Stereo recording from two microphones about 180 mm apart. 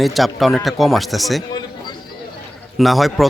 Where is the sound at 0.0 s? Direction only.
Centre (ahead or behind).